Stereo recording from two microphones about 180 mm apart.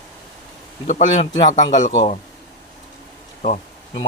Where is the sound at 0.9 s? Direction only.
45° left (ahead or behind).